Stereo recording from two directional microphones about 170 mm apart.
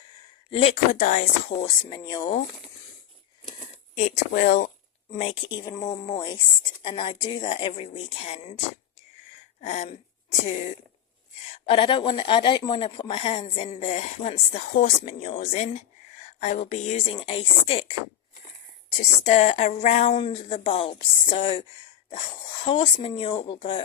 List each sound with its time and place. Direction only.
0.5 s speech: 35° left (ahead or behind)
1.6 s speech: 25° left (ahead or behind)
3.9 s speech: 45° left (ahead or behind)
5.1 s speech: 35° left (ahead or behind)
9.6 s speech: 40° left (ahead or behind)
11.5 s a woman's voice: 30° left (ahead or behind)
17.2 s speech: 30° left (ahead or behind)
19.2 s speech: 40° left (ahead or behind)